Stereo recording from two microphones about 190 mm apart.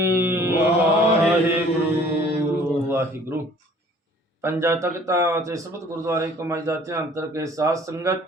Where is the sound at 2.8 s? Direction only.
10° right (ahead or behind).